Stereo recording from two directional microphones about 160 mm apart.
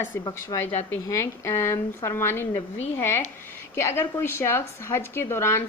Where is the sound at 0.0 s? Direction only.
15° left (ahead or behind).